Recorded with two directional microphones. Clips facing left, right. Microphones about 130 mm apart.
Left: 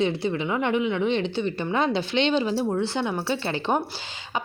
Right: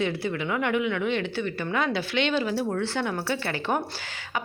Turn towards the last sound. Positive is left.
turn(degrees=20)  # may be behind; listen again after turning